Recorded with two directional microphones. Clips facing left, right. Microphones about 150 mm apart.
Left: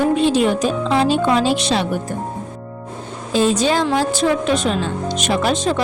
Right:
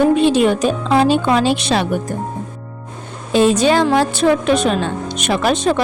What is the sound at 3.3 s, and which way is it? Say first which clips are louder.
Speech: right 4 dB; 65° right (ahead or behind).